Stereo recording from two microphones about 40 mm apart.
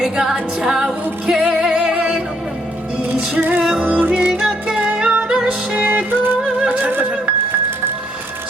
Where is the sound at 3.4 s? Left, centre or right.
Right.